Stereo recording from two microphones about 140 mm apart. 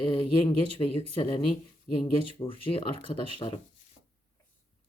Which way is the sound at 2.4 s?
40° left (ahead or behind).